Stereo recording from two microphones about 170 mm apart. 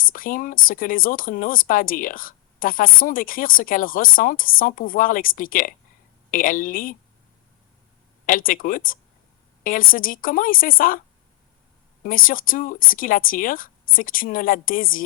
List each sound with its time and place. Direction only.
0.0 s speech: 55° left (ahead or behind)
8.3 s speech: 55° left (ahead or behind)
12.0 s speech: 55° left (ahead or behind)